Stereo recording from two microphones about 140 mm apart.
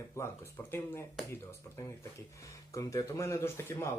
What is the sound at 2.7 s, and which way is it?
Speech, 25° left (ahead or behind).